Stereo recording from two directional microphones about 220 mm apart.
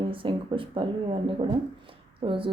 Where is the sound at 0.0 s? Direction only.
25° right (ahead or behind).